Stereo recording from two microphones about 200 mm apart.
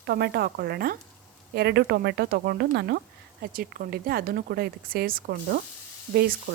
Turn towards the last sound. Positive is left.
turn(degrees=-50)  # may be behind; listen again after turning